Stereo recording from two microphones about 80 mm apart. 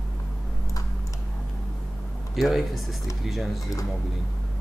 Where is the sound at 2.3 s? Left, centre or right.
Centre.